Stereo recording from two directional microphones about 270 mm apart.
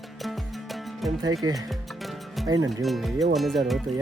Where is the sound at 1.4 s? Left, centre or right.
Right.